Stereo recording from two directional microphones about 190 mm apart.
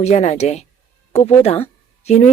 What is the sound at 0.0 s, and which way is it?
A woman's voice, 35° left (ahead or behind).